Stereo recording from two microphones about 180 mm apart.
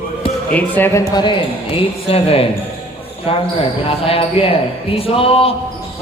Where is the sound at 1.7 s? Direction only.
30° left (ahead or behind).